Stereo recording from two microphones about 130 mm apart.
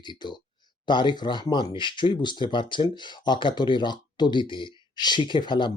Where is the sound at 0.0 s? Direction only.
35° left (ahead or behind).